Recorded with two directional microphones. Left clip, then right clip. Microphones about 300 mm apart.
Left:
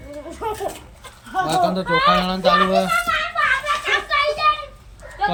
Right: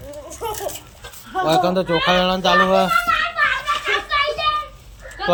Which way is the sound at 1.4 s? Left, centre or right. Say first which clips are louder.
Right 3 dB; centre.